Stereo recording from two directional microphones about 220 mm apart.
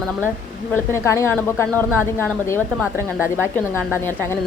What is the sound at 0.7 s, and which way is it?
A woman's voice, 10° left (ahead or behind).